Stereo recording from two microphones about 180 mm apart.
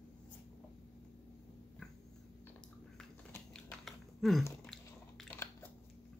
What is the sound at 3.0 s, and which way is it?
Typing, 5° left (ahead or behind).